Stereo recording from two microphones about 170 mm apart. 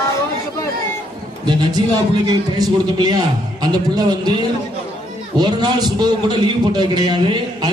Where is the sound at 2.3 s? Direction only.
25° right (ahead or behind).